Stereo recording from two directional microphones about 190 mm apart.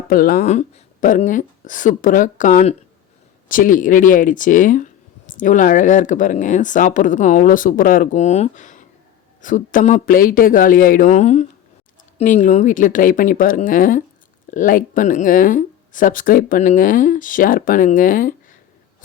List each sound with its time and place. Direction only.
0.1 s speech: 50° left (ahead or behind)